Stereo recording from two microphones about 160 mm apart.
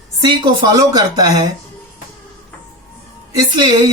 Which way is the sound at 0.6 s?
25° right (ahead or behind).